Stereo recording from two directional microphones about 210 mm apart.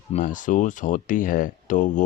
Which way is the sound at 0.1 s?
35° left (ahead or behind).